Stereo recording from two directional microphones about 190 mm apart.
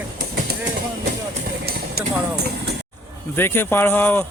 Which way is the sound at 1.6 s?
55° right (ahead or behind).